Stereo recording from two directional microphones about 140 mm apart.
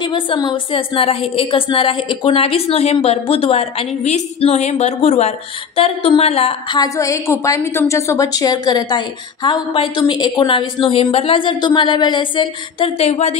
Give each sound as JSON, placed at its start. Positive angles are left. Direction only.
{"t": 0.0, "sound": "a woman's voice", "side_deg": 35}
{"t": 6.8, "sound": "a woman's voice", "side_deg": 20}